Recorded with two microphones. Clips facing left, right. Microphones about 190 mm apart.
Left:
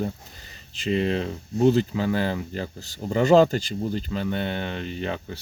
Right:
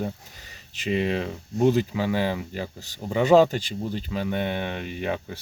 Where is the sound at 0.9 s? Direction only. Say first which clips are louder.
Left 1 dB; 10° right (ahead or behind).